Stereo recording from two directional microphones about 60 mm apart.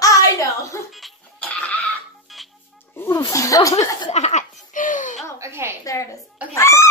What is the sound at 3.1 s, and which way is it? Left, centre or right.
Speech, left.